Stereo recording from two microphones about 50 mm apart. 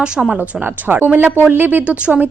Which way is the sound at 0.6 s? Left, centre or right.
Right.